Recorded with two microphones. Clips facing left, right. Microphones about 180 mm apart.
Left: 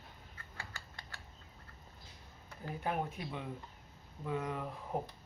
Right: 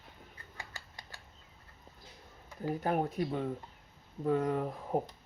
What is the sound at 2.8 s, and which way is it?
Speech, 40° right (ahead or behind).